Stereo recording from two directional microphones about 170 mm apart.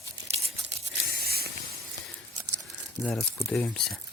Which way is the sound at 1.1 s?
65° right (ahead or behind).